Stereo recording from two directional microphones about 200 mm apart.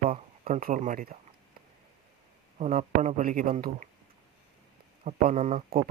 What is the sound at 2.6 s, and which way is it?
A man's voice, 35° right (ahead or behind).